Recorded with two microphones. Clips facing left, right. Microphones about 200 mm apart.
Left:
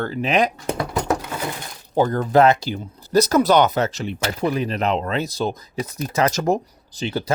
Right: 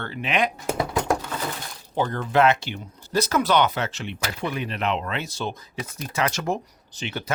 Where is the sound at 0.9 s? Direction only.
5° left (ahead or behind).